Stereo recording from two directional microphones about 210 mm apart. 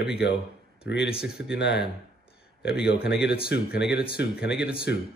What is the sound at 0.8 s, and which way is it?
Speech, 55° left (ahead or behind).